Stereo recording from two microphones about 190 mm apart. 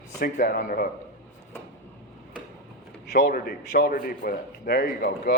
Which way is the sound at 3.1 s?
50° left (ahead or behind).